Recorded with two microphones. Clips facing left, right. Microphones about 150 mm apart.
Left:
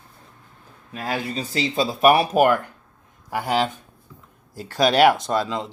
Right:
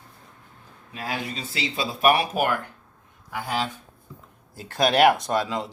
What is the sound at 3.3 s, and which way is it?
Speech, 65° left (ahead or behind).